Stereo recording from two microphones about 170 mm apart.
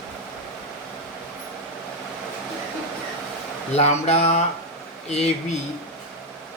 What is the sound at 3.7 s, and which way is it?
Speech, 40° left (ahead or behind).